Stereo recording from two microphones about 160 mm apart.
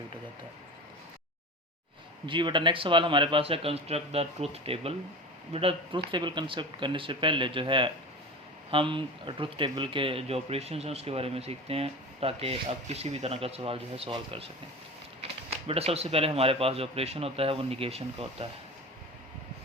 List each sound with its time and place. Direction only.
2.2 s speech: 30° right (ahead or behind)